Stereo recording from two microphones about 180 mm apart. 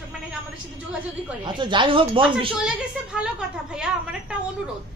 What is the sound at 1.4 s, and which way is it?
Speech, 25° right (ahead or behind).